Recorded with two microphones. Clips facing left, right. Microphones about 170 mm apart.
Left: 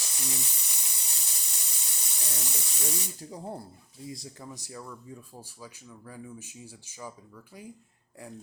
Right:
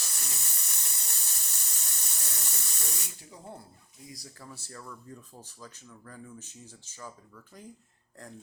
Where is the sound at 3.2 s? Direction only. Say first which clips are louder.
Left 7 dB; 40° left (ahead or behind).